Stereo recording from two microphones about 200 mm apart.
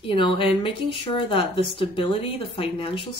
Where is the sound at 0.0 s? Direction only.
25° left (ahead or behind).